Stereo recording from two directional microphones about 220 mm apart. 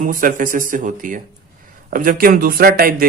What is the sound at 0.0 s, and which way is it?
A man's voice, 35° right (ahead or behind).